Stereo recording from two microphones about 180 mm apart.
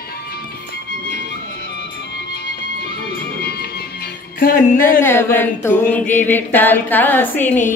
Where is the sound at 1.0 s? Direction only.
70° left (ahead or behind); by 5.0 s 50° left (ahead or behind).